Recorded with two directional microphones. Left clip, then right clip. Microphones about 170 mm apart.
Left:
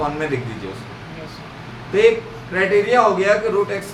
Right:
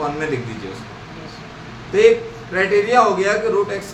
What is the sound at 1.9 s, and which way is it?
A man's voice, centre (ahead or behind).